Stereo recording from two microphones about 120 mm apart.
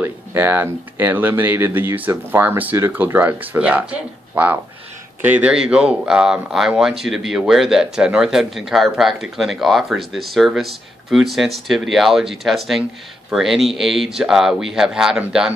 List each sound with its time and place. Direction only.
0.0 s speech: 15° right (ahead or behind)